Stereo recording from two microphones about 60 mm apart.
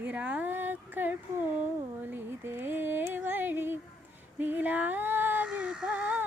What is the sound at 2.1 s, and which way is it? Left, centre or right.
Female singing, right.